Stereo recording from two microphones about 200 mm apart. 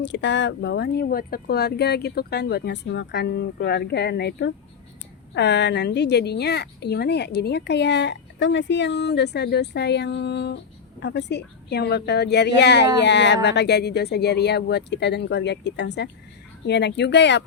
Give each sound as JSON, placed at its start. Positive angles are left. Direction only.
{"t": 0.0, "sound": "a woman's voice", "side_deg": 65}